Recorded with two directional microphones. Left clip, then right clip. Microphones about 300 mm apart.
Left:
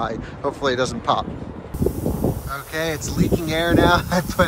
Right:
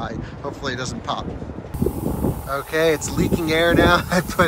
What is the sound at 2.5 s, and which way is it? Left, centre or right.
Speech, centre.